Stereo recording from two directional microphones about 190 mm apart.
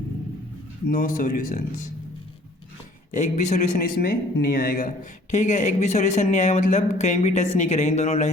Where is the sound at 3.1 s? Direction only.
40° left (ahead or behind).